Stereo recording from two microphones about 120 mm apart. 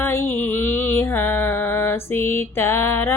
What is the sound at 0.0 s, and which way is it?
Music, 20° left (ahead or behind).